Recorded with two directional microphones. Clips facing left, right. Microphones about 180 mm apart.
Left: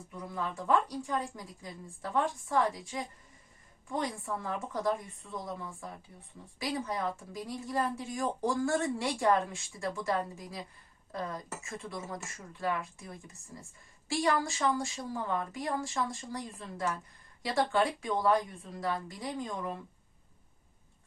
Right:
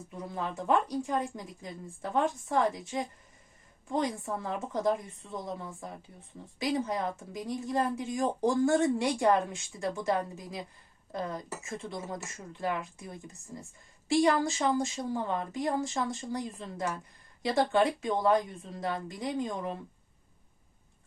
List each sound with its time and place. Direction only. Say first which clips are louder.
0.3 s speech: right 1 dB; 25° right (ahead or behind)
6.6 s speech: right 4 dB; 20° right (ahead or behind)